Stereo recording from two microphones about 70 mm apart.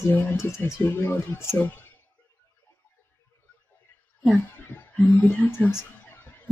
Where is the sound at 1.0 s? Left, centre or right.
Left.